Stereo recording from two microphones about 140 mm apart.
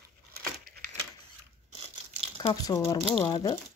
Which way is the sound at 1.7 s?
45° right (ahead or behind).